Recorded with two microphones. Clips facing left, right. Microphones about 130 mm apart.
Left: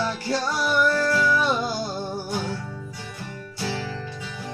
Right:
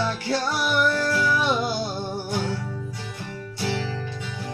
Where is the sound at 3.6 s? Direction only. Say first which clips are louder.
Right 2 dB; 20° right (ahead or behind).